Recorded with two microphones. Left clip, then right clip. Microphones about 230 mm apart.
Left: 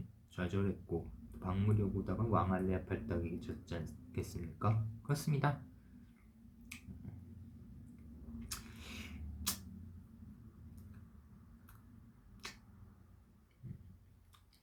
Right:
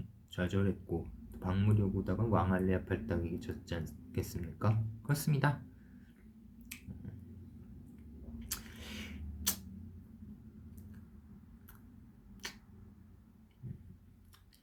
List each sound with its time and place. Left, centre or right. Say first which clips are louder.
0.3 s speech: right 4 dB; centre
8.4 s a sound: right 4 dB; centre
12.4 s finger snapping: right 4 dB; centre